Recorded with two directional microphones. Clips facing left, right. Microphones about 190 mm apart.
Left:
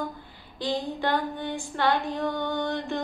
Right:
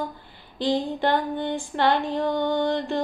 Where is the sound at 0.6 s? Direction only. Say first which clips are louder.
Right 5 dB; 20° right (ahead or behind).